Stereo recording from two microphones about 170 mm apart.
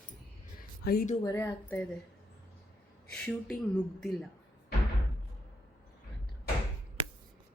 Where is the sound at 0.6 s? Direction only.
60° left (ahead or behind).